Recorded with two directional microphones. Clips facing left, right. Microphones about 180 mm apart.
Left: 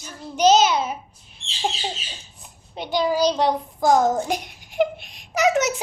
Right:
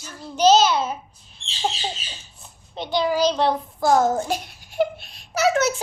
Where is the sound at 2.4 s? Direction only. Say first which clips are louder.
Right 1 dB; 10° left (ahead or behind).